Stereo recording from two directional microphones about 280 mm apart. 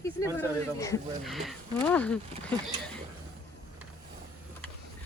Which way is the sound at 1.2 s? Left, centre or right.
Centre.